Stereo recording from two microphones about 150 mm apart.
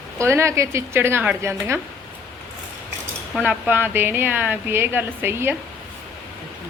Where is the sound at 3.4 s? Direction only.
10° right (ahead or behind).